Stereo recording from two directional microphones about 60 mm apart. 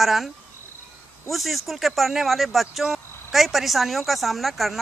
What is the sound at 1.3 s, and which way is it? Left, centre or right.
A woman's voice, centre.